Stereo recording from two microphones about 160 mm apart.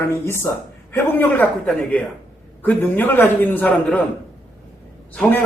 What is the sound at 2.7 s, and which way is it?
A man's voice, 10° left (ahead or behind).